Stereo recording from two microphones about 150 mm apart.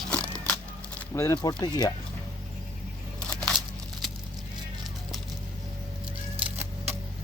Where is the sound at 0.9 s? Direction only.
20° left (ahead or behind).